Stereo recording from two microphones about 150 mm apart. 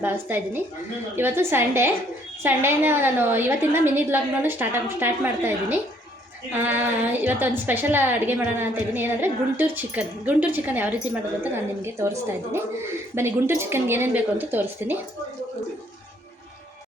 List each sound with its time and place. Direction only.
0.0 s a woman's voice: 15° right (ahead or behind)
13.1 s a woman's voice: 15° right (ahead or behind)